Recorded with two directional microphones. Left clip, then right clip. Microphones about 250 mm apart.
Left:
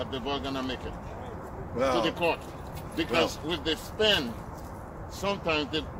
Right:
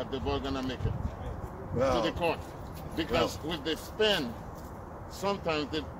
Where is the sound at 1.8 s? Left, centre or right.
Centre.